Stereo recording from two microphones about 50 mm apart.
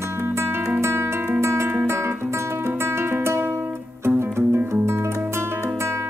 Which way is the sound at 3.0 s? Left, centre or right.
Right.